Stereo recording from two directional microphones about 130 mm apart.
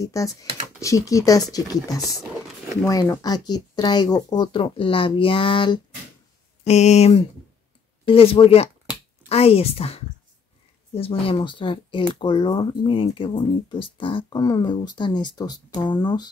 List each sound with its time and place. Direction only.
0.0 s speech: 25° left (ahead or behind); by 5.8 s 40° left (ahead or behind)
6.6 s speech: 60° left (ahead or behind); by 16.3 s 35° left (ahead or behind)